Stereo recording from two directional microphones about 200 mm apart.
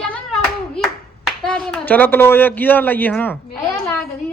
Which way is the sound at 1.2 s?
Centre (ahead or behind).